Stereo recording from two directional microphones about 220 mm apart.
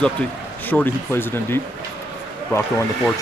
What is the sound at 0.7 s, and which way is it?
Speech, 10° left (ahead or behind).